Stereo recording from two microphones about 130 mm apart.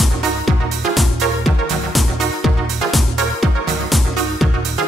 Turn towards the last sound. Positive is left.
turn(degrees=0)  # may be behind; listen again after turning